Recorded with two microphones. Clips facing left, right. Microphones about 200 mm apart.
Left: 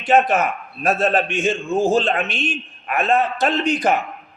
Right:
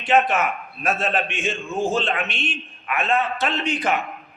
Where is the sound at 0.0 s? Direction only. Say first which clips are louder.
Left 3 dB; 40° left (ahead or behind).